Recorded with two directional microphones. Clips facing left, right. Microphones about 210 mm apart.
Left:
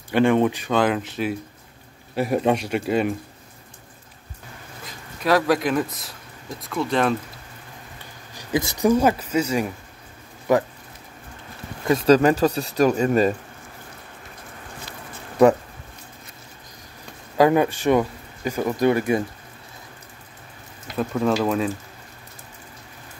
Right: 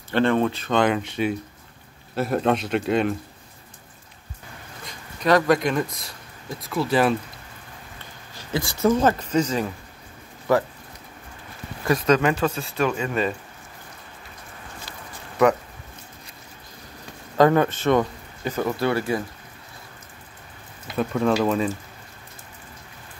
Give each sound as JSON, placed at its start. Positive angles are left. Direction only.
{"t": 0.1, "sound": "speech", "side_deg": 15}
{"t": 0.7, "sound": "speech", "side_deg": 0}
{"t": 2.1, "sound": "speech", "side_deg": 10}
{"t": 4.8, "sound": "speech", "side_deg": 5}
{"t": 8.0, "sound": "speech", "side_deg": 15}
{"t": 11.9, "sound": "speech", "side_deg": 35}
{"t": 17.4, "sound": "speech", "side_deg": 10}
{"t": 20.8, "sound": "speech", "side_deg": 0}